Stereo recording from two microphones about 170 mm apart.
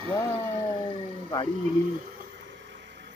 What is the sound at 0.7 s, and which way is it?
Speech, 25° left (ahead or behind).